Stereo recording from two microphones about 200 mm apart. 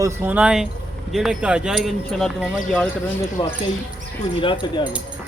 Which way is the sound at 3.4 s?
25° left (ahead or behind).